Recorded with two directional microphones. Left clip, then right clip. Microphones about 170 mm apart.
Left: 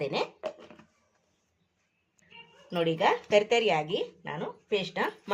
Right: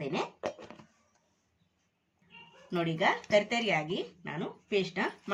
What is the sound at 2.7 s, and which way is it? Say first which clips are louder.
Speech: left 3 dB; 35° left (ahead or behind).